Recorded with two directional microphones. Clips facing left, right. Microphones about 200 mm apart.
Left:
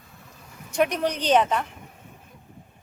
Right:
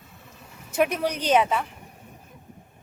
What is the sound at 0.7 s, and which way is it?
Speech, 5° right (ahead or behind).